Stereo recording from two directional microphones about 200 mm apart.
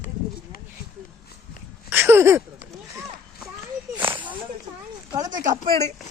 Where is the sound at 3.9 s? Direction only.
25° right (ahead or behind).